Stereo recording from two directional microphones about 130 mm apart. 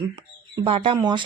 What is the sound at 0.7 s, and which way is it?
Speech, 45° right (ahead or behind).